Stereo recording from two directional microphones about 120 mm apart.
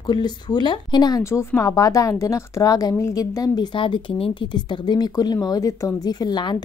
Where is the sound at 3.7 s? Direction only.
40° left (ahead or behind).